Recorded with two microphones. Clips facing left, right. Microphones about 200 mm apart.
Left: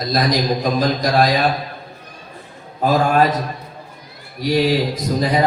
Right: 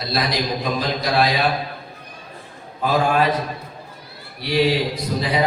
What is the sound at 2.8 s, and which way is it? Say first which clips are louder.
Speech: left 3 dB; 45° left (ahead or behind).